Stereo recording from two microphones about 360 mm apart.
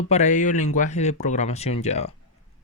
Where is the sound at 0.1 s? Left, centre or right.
Centre.